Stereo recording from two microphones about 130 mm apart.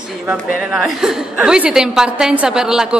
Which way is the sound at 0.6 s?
5° right (ahead or behind).